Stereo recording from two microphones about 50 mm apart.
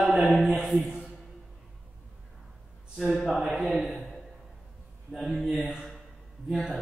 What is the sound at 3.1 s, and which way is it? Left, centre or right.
Speech, centre.